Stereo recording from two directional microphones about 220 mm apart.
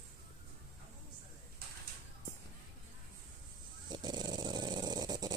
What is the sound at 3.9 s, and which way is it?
Dog, 20° right (ahead or behind).